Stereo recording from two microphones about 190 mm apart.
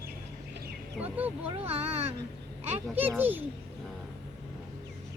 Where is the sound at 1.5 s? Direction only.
30° right (ahead or behind).